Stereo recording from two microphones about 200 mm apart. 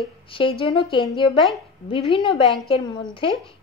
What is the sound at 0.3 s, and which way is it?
Speech, 25° left (ahead or behind).